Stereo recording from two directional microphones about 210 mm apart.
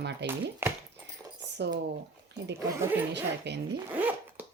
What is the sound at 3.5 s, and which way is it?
Speech, 55° right (ahead or behind).